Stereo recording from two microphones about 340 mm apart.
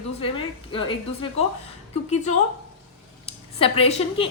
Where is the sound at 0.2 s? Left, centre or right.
Centre.